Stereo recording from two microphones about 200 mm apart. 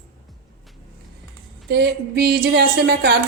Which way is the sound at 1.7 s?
55° right (ahead or behind).